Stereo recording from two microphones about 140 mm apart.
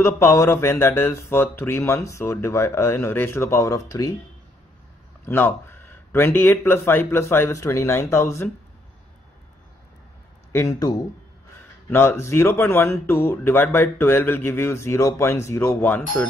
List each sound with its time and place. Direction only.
0.0 s speech: 20° left (ahead or behind)
5.2 s speech: 15° left (ahead or behind)
10.5 s speech: 20° left (ahead or behind)
11.9 s speech: 15° left (ahead or behind)